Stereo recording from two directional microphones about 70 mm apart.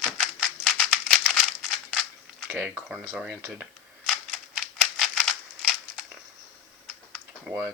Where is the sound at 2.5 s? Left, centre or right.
Centre.